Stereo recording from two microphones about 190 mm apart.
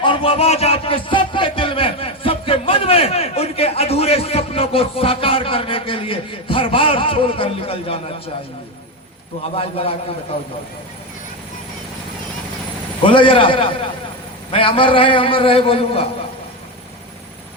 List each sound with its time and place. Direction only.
0.0 s speech: 25° left (ahead or behind)
9.6 s a man's voice: 30° left (ahead or behind)
13.1 s speech: 25° left (ahead or behind)